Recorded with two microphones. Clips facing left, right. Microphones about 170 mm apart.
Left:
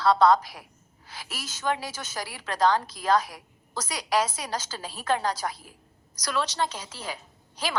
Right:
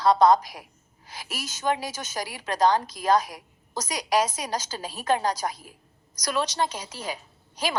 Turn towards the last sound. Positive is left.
turn(degrees=-15)  # may be behind; listen again after turning